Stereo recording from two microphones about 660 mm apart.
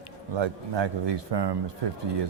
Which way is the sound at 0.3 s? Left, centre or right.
Right.